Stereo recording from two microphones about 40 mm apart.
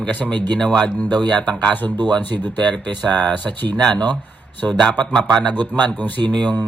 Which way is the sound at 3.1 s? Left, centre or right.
Left.